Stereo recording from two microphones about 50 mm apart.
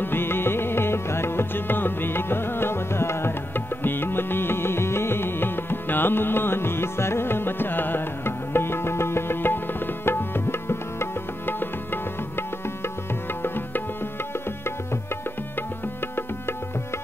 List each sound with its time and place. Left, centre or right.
0.0 s music: left